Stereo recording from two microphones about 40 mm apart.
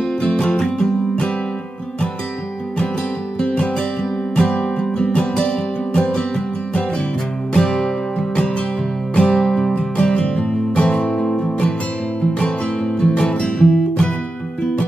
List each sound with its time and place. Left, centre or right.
0.3 s music: left
3.3 s music: left
9.8 s music: left